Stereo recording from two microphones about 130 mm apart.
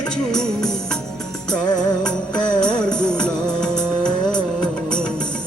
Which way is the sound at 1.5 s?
30° left (ahead or behind).